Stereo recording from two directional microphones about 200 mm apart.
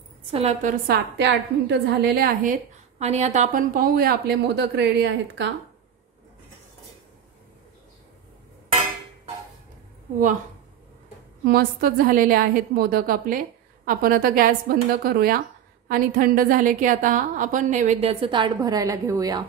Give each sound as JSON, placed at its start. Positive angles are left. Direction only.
{"t": 0.3, "sound": "a woman's voice", "side_deg": -30}
{"t": 0.9, "sound": "a woman's voice", "side_deg": -65}
{"t": 11.4, "sound": "a woman's voice", "side_deg": -50}